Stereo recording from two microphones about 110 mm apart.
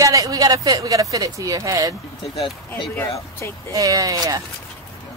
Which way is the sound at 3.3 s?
25° left (ahead or behind).